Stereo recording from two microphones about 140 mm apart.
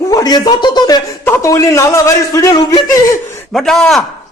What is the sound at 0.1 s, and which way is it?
Speech, 30° left (ahead or behind).